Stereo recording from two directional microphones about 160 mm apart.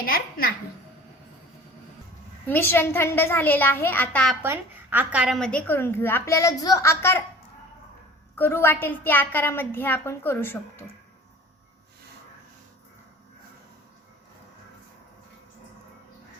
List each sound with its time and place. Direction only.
0.0 s a woman's voice: 65° left (ahead or behind)
2.5 s a woman's voice: 15° left (ahead or behind)
4.4 s a woman's voice: 10° right (ahead or behind)
5.4 s a woman's voice: 5° left (ahead or behind)
8.4 s a woman's voice: 15° left (ahead or behind)